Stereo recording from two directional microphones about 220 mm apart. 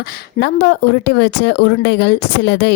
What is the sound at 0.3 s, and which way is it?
Speech, 45° left (ahead or behind).